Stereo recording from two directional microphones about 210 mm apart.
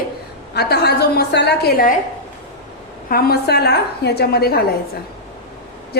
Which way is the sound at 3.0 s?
45° left (ahead or behind).